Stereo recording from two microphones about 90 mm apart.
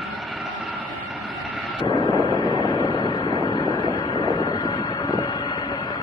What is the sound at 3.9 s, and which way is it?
Vehicle, 45° left (ahead or behind).